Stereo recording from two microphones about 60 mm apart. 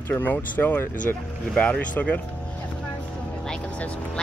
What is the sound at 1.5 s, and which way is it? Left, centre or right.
Speech, centre.